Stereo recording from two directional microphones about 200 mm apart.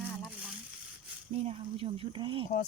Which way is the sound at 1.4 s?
30° right (ahead or behind).